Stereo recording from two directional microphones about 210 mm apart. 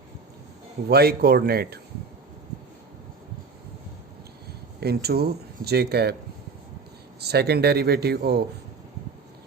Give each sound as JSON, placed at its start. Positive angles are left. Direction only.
{"t": 0.9, "sound": "speech", "side_deg": -50}
{"t": 4.8, "sound": "speech", "side_deg": -50}
{"t": 7.2, "sound": "speech", "side_deg": -50}